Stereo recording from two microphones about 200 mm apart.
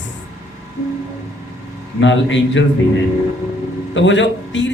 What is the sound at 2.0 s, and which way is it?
Speech, 65° left (ahead or behind).